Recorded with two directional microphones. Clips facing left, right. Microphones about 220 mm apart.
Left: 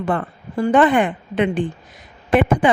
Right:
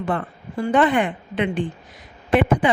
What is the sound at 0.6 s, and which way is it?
A woman's voice, 50° left (ahead or behind).